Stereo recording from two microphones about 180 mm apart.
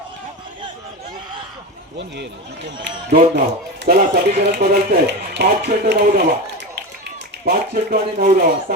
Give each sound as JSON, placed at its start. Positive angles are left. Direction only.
{"t": 2.8, "sound": "speech", "side_deg": -65}
{"t": 7.4, "sound": "speech", "side_deg": -55}